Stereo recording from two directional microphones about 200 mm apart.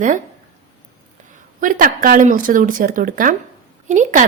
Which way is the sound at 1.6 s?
40° right (ahead or behind).